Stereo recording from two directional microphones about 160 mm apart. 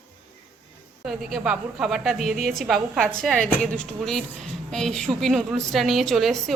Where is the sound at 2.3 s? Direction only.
65° right (ahead or behind).